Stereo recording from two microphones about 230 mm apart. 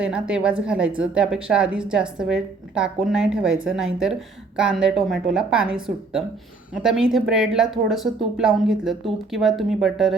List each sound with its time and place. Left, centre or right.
0.0 s a woman's voice: centre